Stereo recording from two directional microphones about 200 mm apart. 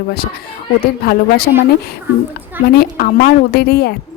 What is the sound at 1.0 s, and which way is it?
Speech, 50° left (ahead or behind).